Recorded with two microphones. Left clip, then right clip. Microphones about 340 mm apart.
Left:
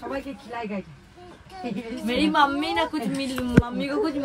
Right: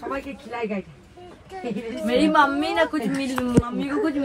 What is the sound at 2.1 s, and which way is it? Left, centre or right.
A woman's voice, centre.